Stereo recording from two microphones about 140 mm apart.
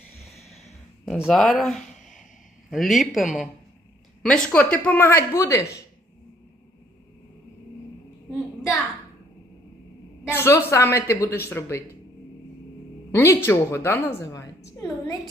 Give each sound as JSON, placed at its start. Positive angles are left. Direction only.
{"t": 0.5, "sound": "a sound", "side_deg": 0}
{"t": 2.6, "sound": "speech", "side_deg": 0}
{"t": 10.2, "sound": "a woman's voice", "side_deg": 20}
{"t": 13.1, "sound": "a woman's voice", "side_deg": 15}